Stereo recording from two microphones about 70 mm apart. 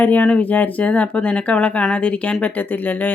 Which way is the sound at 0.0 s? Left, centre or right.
Left.